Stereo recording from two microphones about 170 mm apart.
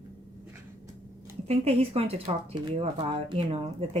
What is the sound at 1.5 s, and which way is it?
A woman's voice, 35° right (ahead or behind).